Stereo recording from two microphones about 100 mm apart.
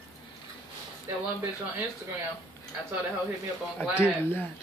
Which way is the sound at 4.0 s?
25° left (ahead or behind).